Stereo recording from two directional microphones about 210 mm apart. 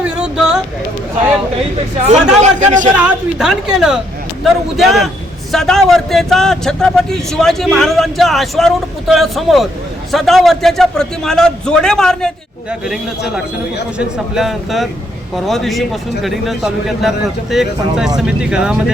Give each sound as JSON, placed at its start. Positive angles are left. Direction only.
{"t": 0.0, "sound": "a sound", "side_deg": -5}
{"t": 2.0, "sound": "speech", "side_deg": -35}
{"t": 2.9, "sound": "a man's voice", "side_deg": -5}
{"t": 14.3, "sound": "a man's voice", "side_deg": 0}